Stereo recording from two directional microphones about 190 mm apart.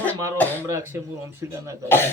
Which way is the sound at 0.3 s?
10° left (ahead or behind).